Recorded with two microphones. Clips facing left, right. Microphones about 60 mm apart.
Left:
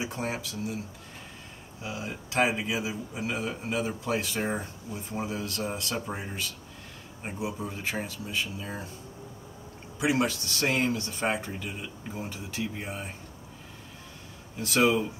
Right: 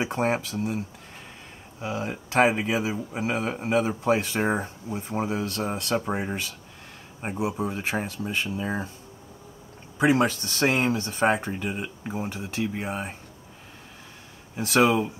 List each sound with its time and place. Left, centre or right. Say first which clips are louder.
0.0 s speech: right 8 dB; right
4.4 s speech: right 5 dB; right
9.9 s speech: right 5 dB; right
14.7 s speech: right 3 dB; right